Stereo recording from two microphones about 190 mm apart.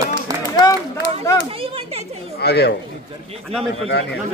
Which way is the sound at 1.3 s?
15° left (ahead or behind).